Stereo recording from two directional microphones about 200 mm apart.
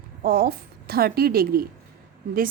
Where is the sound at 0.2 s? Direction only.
50° right (ahead or behind).